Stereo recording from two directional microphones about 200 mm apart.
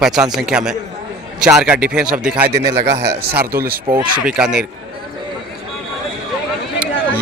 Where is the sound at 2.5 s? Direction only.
55° right (ahead or behind).